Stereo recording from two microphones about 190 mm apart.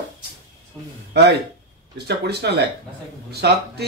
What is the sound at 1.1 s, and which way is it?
Speech, 60° right (ahead or behind).